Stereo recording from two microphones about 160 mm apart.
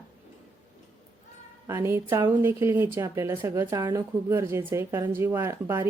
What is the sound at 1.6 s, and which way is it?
A woman's voice, 15° right (ahead or behind).